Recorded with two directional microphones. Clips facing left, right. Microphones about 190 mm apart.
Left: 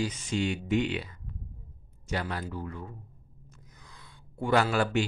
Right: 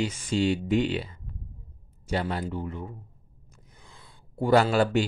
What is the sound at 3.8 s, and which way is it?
Gasp, 30° right (ahead or behind).